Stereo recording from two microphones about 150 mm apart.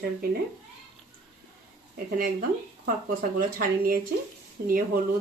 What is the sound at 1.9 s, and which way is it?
Speech, 70° right (ahead or behind).